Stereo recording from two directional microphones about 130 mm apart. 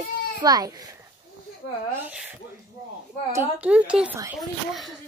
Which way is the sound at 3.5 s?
10° right (ahead or behind).